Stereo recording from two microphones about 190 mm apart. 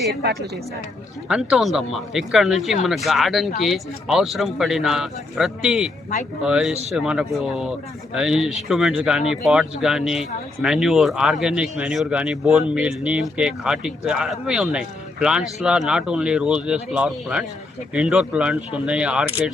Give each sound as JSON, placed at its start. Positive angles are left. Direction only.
{"t": 0.0, "sound": "a woman's voice", "side_deg": -55}
{"t": 1.3, "sound": "speech", "side_deg": -5}